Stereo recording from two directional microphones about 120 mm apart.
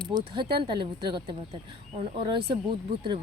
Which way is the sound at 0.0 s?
35° right (ahead or behind).